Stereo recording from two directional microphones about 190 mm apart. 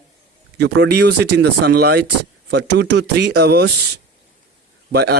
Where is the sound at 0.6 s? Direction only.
60° right (ahead or behind).